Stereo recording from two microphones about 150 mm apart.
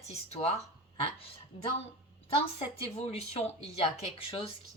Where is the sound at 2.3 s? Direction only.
40° left (ahead or behind).